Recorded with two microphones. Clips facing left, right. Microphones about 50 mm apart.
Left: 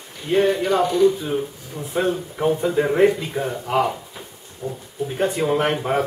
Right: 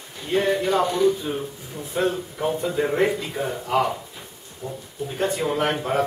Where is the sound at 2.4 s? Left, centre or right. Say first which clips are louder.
Left 4 dB; centre.